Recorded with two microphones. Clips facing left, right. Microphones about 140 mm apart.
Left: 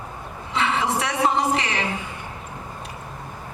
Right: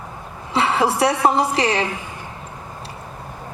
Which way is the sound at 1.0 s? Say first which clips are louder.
Right 5 dB; 35° right (ahead or behind).